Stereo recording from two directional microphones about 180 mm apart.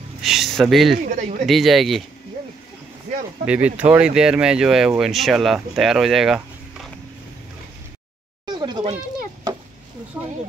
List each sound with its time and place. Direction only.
0.2 s speech: centre (ahead or behind)
0.9 s speech: 50° right (ahead or behind)
1.4 s speech: centre (ahead or behind)
3.4 s speech: 10° right (ahead or behind)
8.5 s a sound: 25° right (ahead or behind)